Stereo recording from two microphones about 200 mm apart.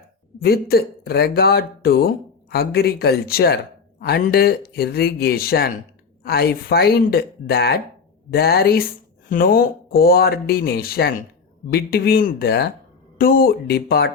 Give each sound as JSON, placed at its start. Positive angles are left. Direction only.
{"t": 0.3, "sound": "speech", "side_deg": 50}